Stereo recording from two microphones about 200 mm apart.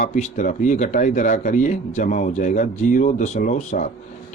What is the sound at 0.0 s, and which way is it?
A man's voice, 40° left (ahead or behind).